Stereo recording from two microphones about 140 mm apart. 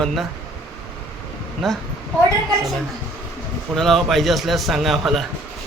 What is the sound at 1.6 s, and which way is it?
Speech, centre (ahead or behind).